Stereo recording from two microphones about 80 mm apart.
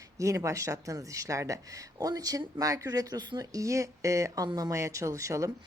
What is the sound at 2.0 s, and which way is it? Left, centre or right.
Speech, right.